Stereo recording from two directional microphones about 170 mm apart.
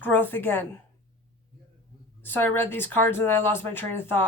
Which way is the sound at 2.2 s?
10° left (ahead or behind).